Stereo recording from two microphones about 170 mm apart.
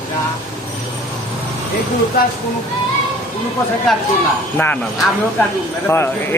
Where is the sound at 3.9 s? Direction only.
Centre (ahead or behind).